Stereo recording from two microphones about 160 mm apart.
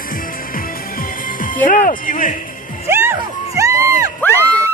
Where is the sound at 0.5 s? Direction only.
60° left (ahead or behind).